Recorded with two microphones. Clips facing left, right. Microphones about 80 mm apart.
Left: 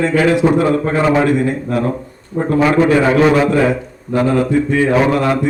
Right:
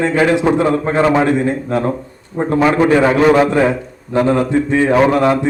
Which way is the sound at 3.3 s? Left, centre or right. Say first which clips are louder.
Right 1 dB; right.